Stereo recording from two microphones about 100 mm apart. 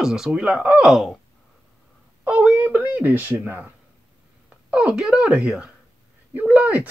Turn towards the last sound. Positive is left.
turn(degrees=-15)  # may be behind; listen again after turning